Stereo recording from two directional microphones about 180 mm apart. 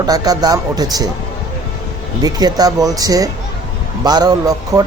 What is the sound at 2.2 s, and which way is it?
Speech, 20° right (ahead or behind).